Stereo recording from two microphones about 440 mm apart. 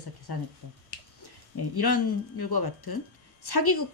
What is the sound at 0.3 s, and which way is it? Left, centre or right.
Speech, left.